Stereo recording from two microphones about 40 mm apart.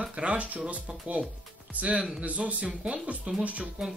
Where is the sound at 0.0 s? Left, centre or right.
Right.